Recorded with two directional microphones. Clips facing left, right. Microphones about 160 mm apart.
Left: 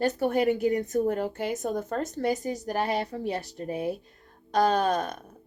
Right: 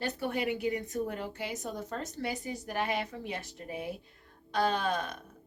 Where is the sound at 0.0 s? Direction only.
45° left (ahead or behind).